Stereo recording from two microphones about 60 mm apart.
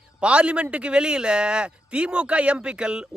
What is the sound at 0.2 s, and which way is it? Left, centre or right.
A man's voice, centre.